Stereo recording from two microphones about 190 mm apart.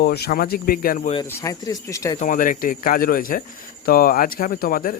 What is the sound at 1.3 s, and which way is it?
Speech, 15° left (ahead or behind).